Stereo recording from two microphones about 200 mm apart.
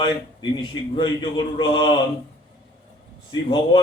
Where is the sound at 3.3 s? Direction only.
20° left (ahead or behind).